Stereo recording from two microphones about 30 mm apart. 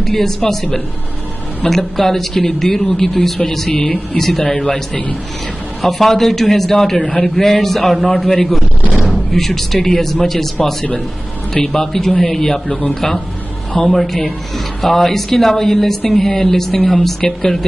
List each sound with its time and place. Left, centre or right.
0.0 s a man's voice: centre
13.8 s a man's voice: centre